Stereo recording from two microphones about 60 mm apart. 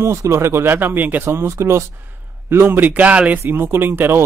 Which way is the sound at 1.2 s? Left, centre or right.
Right.